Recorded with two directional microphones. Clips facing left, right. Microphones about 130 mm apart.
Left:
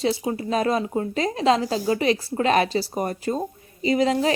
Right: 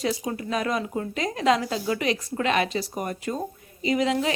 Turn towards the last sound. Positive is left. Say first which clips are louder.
# left 3 dB
turn(degrees=35)  # may be behind; listen again after turning